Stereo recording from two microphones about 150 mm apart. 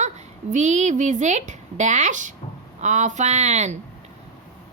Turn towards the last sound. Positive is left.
turn(degrees=-50)  # may be behind; listen again after turning